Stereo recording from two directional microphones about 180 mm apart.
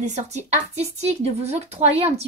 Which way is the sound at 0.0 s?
40° right (ahead or behind).